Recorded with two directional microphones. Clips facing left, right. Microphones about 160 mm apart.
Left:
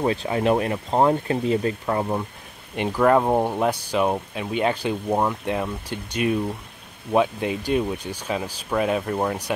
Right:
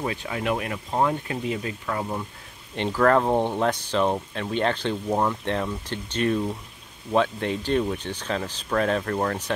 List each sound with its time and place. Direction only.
0.0 s speech: 30° left (ahead or behind)
2.7 s speech: 10° left (ahead or behind)